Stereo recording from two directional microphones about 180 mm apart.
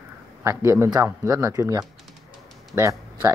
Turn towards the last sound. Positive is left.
turn(degrees=-15)  # may be behind; listen again after turning